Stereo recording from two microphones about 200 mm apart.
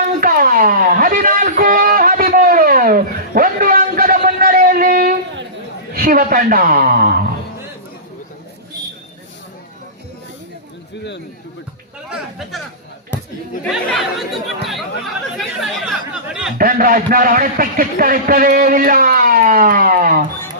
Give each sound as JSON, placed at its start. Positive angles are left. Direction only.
{"t": 0.2, "sound": "a sound", "side_deg": -45}
{"t": 5.9, "sound": "a woman's voice", "side_deg": -45}
{"t": 13.8, "sound": "speech", "side_deg": 0}
{"t": 15.4, "sound": "chatter", "side_deg": 0}
{"t": 16.6, "sound": "a man's voice", "side_deg": -45}